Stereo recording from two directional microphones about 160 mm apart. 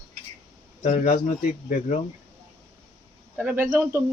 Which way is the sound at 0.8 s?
45° left (ahead or behind).